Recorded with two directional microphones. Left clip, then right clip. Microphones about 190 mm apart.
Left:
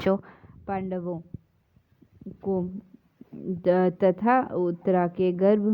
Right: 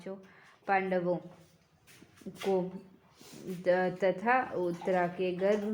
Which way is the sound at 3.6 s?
35° left (ahead or behind).